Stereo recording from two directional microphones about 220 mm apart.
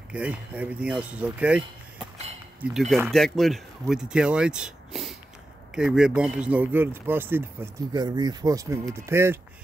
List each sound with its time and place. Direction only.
0.1 s speech: 5° right (ahead or behind)
2.6 s speech: centre (ahead or behind)